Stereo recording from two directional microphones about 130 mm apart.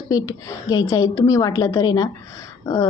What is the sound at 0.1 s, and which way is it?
A woman's voice, 25° left (ahead or behind).